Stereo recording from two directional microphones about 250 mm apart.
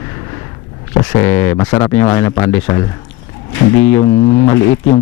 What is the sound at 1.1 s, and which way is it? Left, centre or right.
A man's voice, centre.